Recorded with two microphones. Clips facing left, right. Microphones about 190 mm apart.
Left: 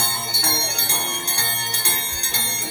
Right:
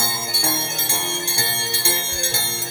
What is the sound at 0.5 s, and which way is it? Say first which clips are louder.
Music: right 1 dB; 10° left (ahead or behind).